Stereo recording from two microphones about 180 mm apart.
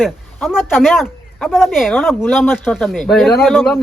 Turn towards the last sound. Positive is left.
turn(degrees=0)  # may be behind; listen again after turning